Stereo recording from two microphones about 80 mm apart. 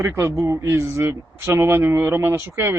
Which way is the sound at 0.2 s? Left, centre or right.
Right.